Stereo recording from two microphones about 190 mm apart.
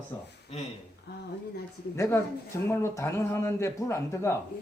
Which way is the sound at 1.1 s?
60° left (ahead or behind).